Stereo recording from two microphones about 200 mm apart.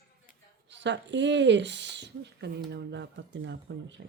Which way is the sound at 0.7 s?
60° right (ahead or behind).